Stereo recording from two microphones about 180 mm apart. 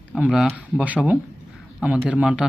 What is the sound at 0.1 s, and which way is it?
Speech, centre (ahead or behind).